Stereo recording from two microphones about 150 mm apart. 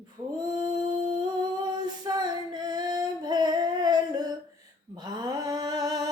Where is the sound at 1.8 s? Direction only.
25° right (ahead or behind).